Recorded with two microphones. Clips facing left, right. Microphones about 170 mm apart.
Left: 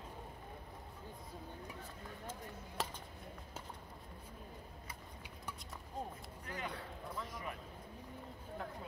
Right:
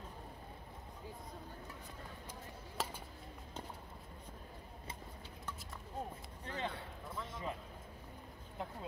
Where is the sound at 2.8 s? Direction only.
Centre (ahead or behind).